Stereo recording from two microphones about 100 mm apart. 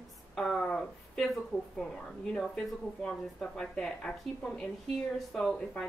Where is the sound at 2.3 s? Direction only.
5° left (ahead or behind).